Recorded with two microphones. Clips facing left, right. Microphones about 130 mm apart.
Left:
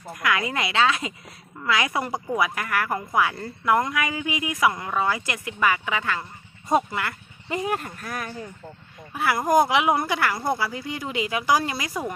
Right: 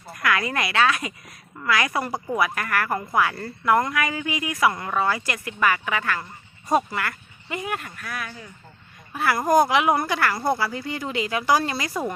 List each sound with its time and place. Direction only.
0.1 s speech: 20° left (ahead or behind)
7.5 s speech: 35° left (ahead or behind)
9.1 s speech: 15° left (ahead or behind)